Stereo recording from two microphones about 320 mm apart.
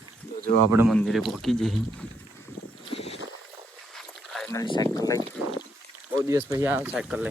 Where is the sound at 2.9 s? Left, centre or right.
Centre.